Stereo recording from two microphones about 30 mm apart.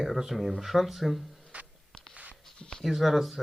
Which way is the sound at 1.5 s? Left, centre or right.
Right.